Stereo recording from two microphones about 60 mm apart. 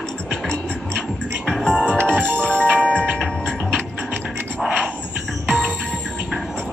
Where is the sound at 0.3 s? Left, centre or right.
Centre.